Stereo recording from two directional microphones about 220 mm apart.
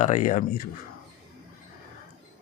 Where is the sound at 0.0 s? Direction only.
35° left (ahead or behind).